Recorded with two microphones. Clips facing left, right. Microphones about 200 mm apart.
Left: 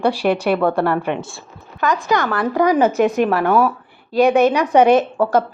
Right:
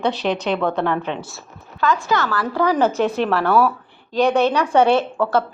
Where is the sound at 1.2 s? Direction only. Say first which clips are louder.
Left 3 dB; 25° left (ahead or behind).